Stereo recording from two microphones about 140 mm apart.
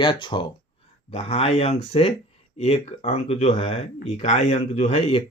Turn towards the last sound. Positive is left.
turn(degrees=40)  # may be behind; listen again after turning